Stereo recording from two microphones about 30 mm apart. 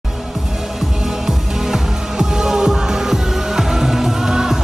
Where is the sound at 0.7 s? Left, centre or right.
Centre.